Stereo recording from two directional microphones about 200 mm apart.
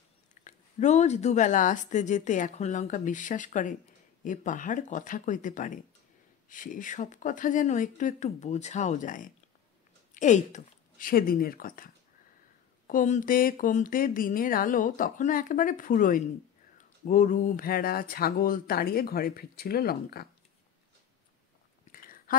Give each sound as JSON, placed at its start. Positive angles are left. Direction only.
{"t": 0.3, "sound": "speech", "side_deg": 40}
{"t": 21.9, "sound": "chewing", "side_deg": 45}